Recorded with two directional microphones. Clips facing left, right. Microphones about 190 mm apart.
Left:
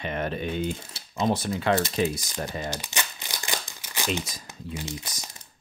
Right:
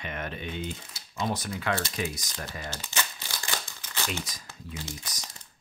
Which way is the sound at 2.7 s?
15° left (ahead or behind).